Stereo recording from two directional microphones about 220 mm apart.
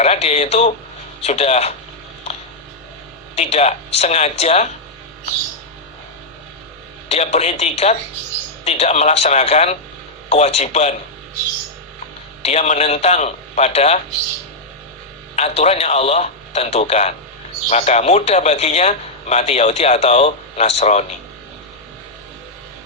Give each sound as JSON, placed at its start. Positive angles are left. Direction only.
{"t": 0.0, "sound": "a man's voice", "side_deg": 30}
{"t": 3.3, "sound": "a man's voice", "side_deg": 30}
{"t": 7.1, "sound": "a man's voice", "side_deg": 30}
{"t": 12.4, "sound": "a man's voice", "side_deg": 30}
{"t": 15.4, "sound": "a man's voice", "side_deg": 30}